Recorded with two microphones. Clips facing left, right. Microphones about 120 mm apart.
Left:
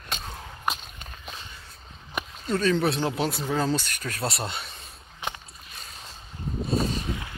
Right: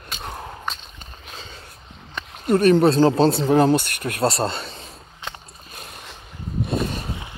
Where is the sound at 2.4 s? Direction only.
60° right (ahead or behind).